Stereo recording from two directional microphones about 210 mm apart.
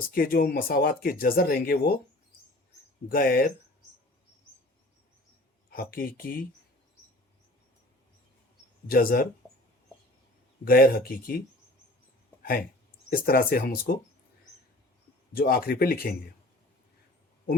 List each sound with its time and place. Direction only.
0.1 s speech: 45° left (ahead or behind)
3.1 s speech: 45° left (ahead or behind)
5.7 s speech: 45° left (ahead or behind)
8.9 s speech: 45° left (ahead or behind)
10.7 s speech: 45° left (ahead or behind)
12.4 s a sound: 45° left (ahead or behind)
13.1 s speech: 45° left (ahead or behind)
15.4 s speech: 45° left (ahead or behind)